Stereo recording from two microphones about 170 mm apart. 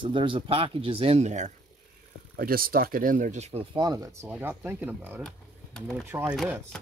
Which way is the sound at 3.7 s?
20° right (ahead or behind).